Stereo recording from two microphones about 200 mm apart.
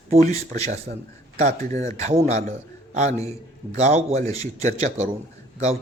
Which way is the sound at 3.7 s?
35° right (ahead or behind).